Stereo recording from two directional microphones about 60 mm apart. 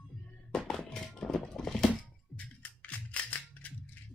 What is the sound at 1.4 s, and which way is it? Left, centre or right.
Music, centre.